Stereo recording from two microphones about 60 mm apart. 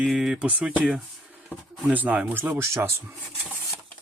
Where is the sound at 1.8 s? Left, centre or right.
Right.